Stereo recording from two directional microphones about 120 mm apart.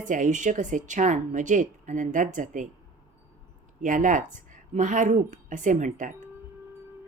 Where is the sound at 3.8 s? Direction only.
90° right.